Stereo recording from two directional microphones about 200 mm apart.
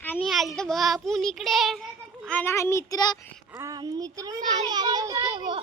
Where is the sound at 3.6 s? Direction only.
20° right (ahead or behind).